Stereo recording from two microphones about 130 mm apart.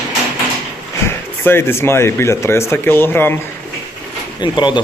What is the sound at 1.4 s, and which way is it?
Speech, 20° left (ahead or behind).